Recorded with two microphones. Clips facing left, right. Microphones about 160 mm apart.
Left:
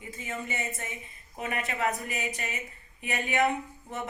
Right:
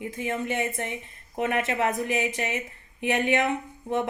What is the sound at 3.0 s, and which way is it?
Speech, 75° right (ahead or behind).